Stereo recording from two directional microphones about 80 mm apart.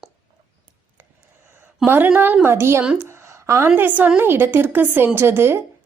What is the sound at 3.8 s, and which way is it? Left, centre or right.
A woman's voice, right.